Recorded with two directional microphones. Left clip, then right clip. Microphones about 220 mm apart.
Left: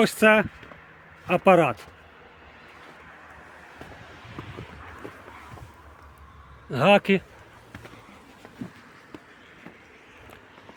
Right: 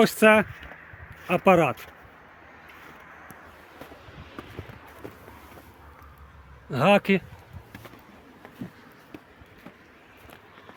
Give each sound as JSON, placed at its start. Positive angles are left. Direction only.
{"t": 0.0, "sound": "speech", "side_deg": -5}
{"t": 4.1, "sound": "a sound", "side_deg": 50}
{"t": 6.7, "sound": "speech", "side_deg": 0}